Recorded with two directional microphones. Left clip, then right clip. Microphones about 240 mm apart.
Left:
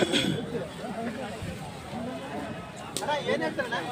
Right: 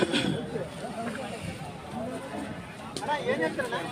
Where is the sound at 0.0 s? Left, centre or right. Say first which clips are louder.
Left 1 dB; centre.